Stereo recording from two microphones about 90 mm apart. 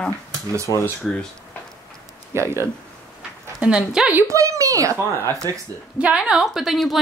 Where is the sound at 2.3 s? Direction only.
30° right (ahead or behind).